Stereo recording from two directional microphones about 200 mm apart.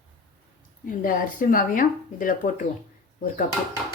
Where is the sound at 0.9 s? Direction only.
45° left (ahead or behind).